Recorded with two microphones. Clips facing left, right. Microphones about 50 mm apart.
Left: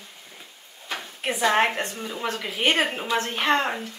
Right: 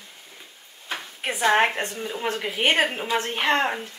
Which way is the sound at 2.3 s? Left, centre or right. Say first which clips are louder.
Right 1 dB; right.